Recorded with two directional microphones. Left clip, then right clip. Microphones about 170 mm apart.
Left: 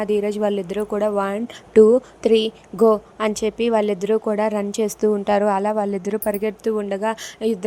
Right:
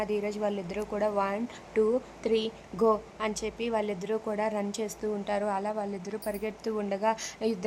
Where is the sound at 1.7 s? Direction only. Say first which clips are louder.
Left 14 dB; 35° left (ahead or behind).